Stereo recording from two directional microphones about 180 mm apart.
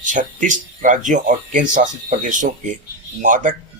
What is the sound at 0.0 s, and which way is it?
Speech, 45° right (ahead or behind).